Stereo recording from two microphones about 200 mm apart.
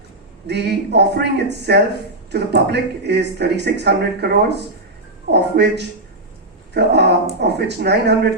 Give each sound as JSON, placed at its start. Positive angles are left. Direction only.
{"t": 0.4, "sound": "speech", "side_deg": -55}